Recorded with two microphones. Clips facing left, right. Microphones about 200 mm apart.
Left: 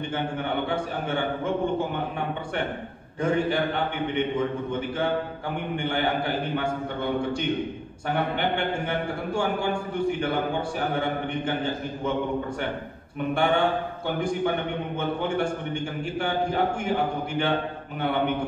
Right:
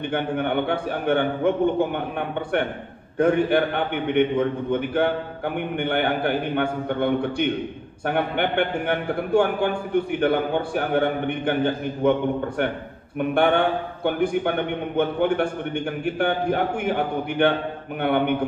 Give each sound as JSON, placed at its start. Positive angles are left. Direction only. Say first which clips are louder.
{"t": 0.1, "sound": "a man's voice", "louder": "right 6 dB", "side_deg": -60}
{"t": 3.2, "sound": "a man's voice", "louder": "right 5 dB", "side_deg": -60}